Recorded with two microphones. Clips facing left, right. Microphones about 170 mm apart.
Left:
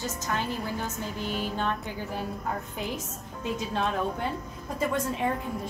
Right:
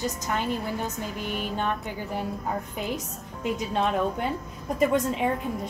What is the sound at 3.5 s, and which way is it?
A woman's voice, 20° right (ahead or behind).